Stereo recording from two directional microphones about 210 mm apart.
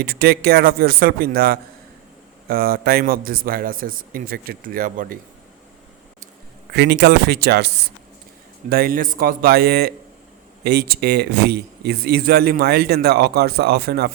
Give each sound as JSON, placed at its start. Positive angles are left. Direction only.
{"t": 0.0, "sound": "speech", "side_deg": -45}
{"t": 6.7, "sound": "speech", "side_deg": -50}